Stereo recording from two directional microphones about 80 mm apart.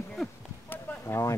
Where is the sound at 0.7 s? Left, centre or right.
Left.